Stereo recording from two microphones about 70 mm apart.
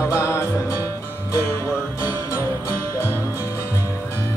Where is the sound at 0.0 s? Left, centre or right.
Left.